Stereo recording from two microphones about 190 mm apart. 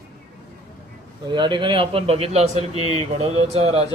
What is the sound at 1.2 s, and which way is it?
A man's voice, 25° right (ahead or behind).